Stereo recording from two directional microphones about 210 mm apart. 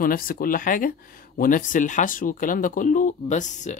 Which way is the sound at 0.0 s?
45° left (ahead or behind).